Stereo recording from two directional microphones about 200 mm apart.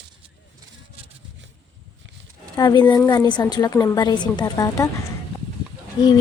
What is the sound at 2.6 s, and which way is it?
A woman's voice, 20° left (ahead or behind).